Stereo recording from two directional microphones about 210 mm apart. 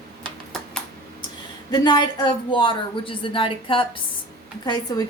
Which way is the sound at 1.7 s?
20° left (ahead or behind).